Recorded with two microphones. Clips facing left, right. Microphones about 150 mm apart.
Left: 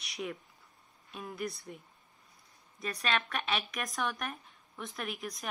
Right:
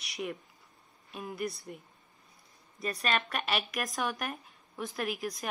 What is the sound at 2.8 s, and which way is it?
A woman's voice, centre (ahead or behind).